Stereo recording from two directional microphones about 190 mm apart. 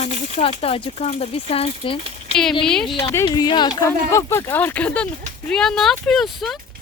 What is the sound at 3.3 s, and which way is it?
Speech, 25° left (ahead or behind).